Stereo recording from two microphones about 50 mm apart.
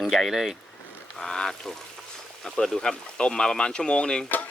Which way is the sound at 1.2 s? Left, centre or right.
Centre.